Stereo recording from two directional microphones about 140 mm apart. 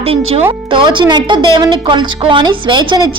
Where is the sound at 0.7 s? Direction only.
35° right (ahead or behind).